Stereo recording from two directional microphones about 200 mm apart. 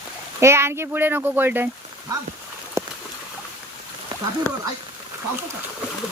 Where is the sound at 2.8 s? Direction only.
15° right (ahead or behind).